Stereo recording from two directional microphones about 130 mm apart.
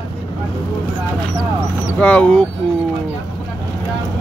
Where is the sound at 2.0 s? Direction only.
10° left (ahead or behind).